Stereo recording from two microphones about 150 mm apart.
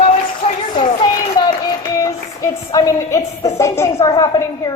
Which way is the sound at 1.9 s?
25° left (ahead or behind).